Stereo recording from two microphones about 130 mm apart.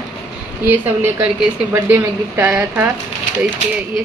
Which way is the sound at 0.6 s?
15° right (ahead or behind).